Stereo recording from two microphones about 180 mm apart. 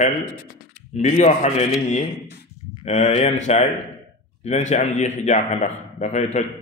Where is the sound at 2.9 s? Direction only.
40° left (ahead or behind).